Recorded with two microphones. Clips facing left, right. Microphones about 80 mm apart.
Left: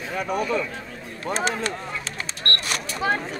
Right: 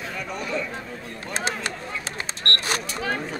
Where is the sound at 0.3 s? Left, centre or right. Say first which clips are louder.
Left 7 dB; left.